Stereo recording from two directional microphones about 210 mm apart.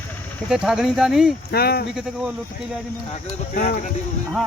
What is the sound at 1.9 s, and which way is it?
Speech, 5° right (ahead or behind).